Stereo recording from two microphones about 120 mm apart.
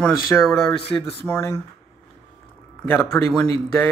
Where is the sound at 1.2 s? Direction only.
25° left (ahead or behind).